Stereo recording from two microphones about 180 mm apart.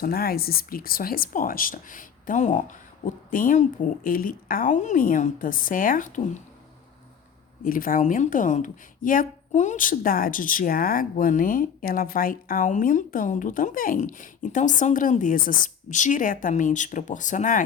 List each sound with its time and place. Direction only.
0.0 s a woman's voice: 55° left (ahead or behind)
7.6 s a woman's voice: 50° left (ahead or behind)